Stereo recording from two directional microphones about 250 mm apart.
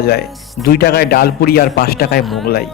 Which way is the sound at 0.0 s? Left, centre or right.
Left.